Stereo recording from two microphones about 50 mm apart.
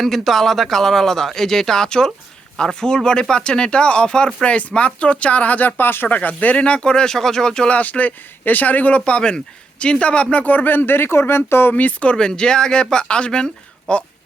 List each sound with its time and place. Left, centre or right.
0.0 s speech: centre; by 6.1 s left
6.1 s speech: left; by 7.8 s centre
7.8 s speech: left
9.0 s speech: centre
10.3 s speech: left
11.7 s speech: left
12.1 s speech: centre